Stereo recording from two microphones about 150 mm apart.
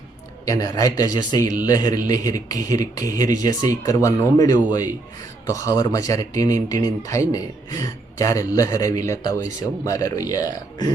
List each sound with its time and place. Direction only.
0.4 s speech: 25° left (ahead or behind)